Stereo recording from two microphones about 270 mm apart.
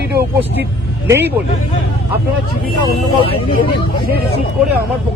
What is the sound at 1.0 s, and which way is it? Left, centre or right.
Speech, centre.